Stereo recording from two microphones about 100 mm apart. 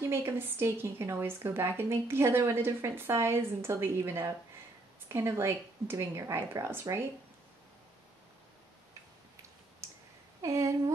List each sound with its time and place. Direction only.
0.1 s a woman's voice: 25° right (ahead or behind)
9.8 s clicking: 30° right (ahead or behind)
10.4 s speech: 35° right (ahead or behind)